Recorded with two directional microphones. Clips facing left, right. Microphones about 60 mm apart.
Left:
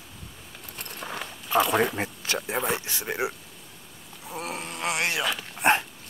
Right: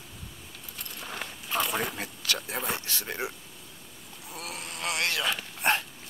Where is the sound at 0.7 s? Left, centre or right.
Left.